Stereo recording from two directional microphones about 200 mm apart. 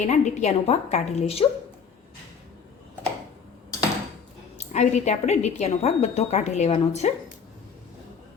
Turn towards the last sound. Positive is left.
turn(degrees=30)  # may be behind; listen again after turning